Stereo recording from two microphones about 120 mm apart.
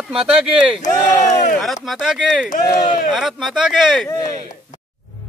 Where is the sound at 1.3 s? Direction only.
85° left.